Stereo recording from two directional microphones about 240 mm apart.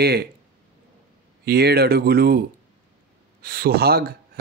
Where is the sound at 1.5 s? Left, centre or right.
Right.